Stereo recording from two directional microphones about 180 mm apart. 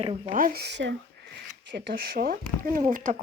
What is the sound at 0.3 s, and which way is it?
Speech, 50° right (ahead or behind).